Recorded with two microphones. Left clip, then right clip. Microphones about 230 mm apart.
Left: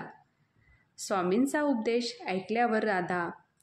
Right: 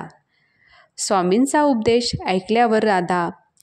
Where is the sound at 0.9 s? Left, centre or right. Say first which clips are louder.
Right 11 dB; right.